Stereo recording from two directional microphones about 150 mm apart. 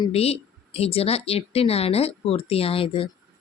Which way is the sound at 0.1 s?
40° left (ahead or behind).